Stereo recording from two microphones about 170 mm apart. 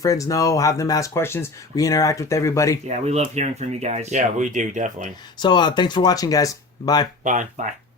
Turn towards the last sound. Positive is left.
turn(degrees=-50)  # may be behind; listen again after turning